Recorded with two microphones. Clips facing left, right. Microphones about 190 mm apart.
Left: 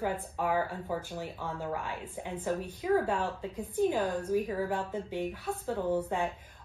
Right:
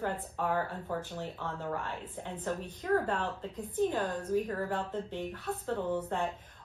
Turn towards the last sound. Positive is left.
turn(degrees=5)  # may be behind; listen again after turning